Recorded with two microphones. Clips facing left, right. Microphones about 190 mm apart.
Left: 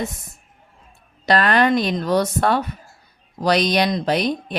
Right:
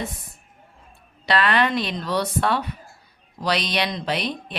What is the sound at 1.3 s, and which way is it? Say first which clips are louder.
Speech: left 4 dB; 45° left (ahead or behind).